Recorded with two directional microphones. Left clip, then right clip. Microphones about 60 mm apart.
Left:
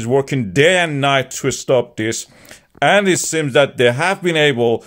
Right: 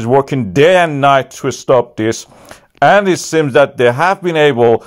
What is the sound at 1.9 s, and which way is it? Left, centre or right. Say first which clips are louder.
Speech: right 5 dB; right.